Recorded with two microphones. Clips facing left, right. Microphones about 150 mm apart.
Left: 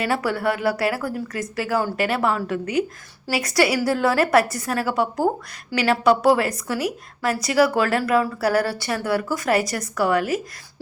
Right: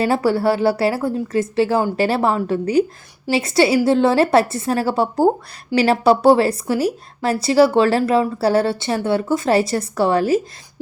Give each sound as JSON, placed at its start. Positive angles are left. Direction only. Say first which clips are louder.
{"t": 0.0, "sound": "speech", "louder": "right 6 dB", "side_deg": -30}